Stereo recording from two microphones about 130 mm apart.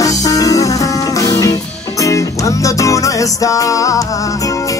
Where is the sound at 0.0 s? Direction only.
25° left (ahead or behind).